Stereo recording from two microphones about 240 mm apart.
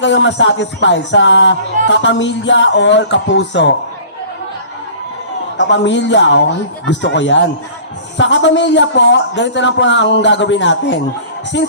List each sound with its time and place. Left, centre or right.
0.0 s speech: left
5.5 s speech: left